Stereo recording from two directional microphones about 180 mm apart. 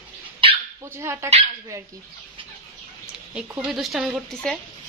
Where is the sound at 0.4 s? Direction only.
30° right (ahead or behind).